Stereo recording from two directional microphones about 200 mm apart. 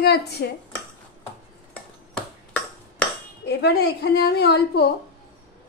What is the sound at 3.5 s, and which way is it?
A woman's voice, 55° left (ahead or behind).